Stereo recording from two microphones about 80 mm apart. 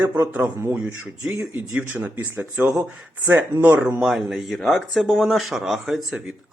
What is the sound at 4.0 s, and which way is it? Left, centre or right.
Speech, centre.